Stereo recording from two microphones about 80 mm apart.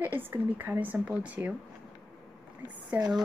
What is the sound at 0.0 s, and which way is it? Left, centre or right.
A woman's voice, right.